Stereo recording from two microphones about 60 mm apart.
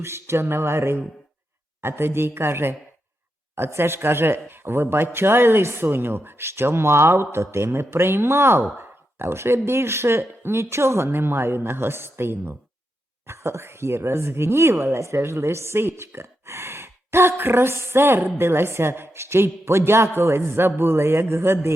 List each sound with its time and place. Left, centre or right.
0.0 s speech: right